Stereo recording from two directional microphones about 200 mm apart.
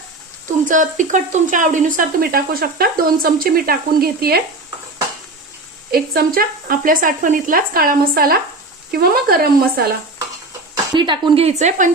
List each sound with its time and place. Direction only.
0.7 s speech: 40° right (ahead or behind)
5.9 s speech: 50° right (ahead or behind)
10.9 s a woman's voice: 25° right (ahead or behind)